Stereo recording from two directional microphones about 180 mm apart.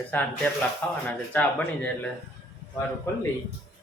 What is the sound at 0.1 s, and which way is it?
Speech, 10° left (ahead or behind).